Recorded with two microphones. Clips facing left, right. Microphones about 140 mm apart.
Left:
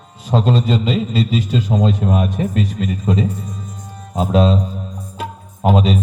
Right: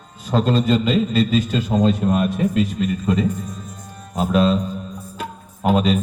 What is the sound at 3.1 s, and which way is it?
A man's voice, 30° left (ahead or behind).